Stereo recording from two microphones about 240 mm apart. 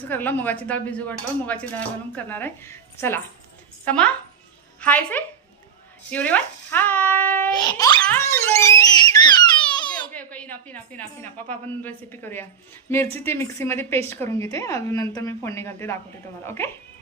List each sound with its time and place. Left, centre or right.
0.1 s speech: centre
7.7 s speech: centre
8.4 s a sound: centre
10.1 s speech: centre